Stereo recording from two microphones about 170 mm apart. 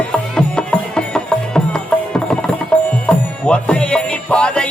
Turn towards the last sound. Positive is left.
turn(degrees=5)  # may be behind; listen again after turning